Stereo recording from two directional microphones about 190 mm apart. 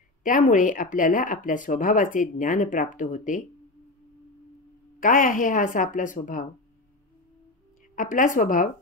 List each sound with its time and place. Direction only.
0.2 s speech: 45° left (ahead or behind)
5.0 s speech: 45° left (ahead or behind)
7.9 s speech: 45° left (ahead or behind)